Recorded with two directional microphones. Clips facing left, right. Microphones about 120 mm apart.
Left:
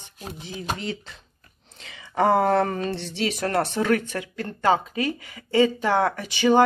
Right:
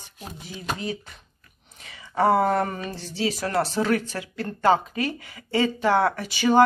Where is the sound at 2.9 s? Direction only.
75° left (ahead or behind).